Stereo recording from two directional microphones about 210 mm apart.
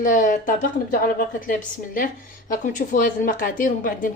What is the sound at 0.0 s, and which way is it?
Speech, 40° left (ahead or behind).